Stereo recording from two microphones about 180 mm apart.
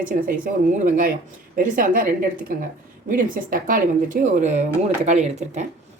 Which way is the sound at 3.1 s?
50° right (ahead or behind).